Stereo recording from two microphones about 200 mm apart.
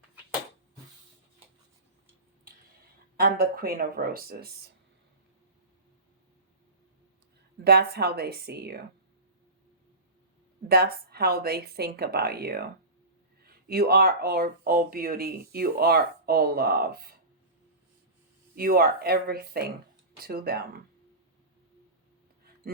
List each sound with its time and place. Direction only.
3.2 s speech: 50° right (ahead or behind)
7.6 s speech: 55° right (ahead or behind)
10.7 s speech: 50° right (ahead or behind)
13.7 s speech: 50° right (ahead or behind)
18.5 s speech: 45° right (ahead or behind)